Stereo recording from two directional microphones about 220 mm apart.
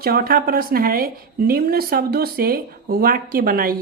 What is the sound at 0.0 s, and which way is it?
A woman's voice, 45° right (ahead or behind).